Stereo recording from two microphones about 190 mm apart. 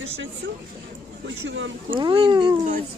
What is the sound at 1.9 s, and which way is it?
Speech, 25° right (ahead or behind).